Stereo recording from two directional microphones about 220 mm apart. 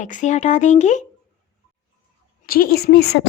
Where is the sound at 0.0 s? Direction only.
35° left (ahead or behind).